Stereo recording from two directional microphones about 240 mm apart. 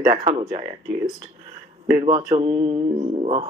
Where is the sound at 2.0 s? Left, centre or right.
Centre.